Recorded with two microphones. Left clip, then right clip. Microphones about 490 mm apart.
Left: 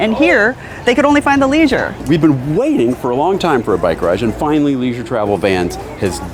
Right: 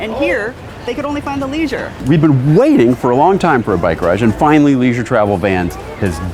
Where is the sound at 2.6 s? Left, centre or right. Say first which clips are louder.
Right 4 dB; right.